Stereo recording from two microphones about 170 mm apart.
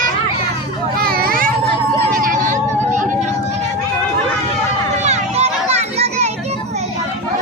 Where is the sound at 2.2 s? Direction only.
50° right (ahead or behind).